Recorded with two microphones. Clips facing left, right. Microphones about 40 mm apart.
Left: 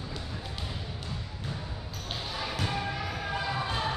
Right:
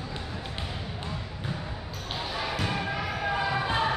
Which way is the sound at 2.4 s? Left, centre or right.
Centre.